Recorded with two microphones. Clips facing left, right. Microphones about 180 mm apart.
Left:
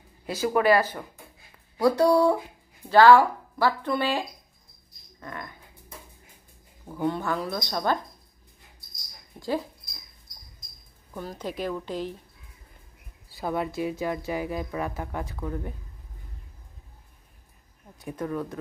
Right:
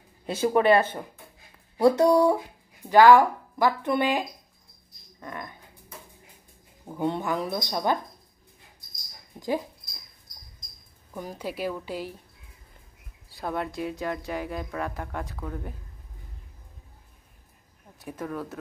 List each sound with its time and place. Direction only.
0.5 s speech: 25° right (ahead or behind)
5.2 s dog: 20° right (ahead or behind)
6.9 s speech: 20° right (ahead or behind)
9.4 s speech: 15° right (ahead or behind)
11.1 s speech: 10° right (ahead or behind)
13.3 s speech: centre (ahead or behind)
17.9 s speech: centre (ahead or behind)